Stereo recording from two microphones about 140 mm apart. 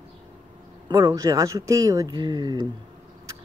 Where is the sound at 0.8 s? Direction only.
25° right (ahead or behind).